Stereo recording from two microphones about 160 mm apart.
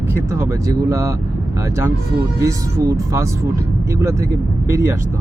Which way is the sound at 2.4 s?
20° right (ahead or behind).